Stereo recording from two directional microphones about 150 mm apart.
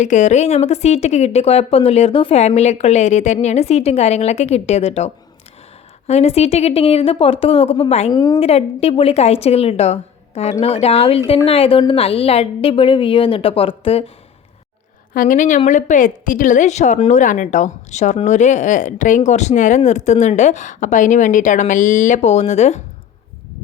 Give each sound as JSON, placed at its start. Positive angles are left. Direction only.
{"t": 0.0, "sound": "speech", "side_deg": 55}
{"t": 8.1, "sound": "a woman's voice", "side_deg": 25}
{"t": 8.4, "sound": "a woman's voice", "side_deg": 40}
{"t": 15.1, "sound": "a woman's voice", "side_deg": 65}